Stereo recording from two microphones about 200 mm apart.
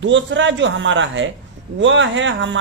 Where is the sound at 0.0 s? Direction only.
65° right (ahead or behind).